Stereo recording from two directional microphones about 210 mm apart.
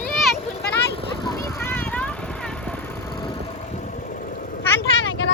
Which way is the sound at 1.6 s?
10° left (ahead or behind).